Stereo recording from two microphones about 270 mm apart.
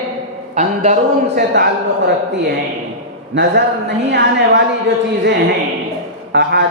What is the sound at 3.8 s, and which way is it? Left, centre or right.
Speech, right.